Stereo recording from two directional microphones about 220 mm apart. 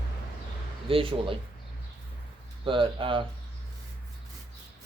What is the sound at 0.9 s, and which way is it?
Speech, 25° right (ahead or behind).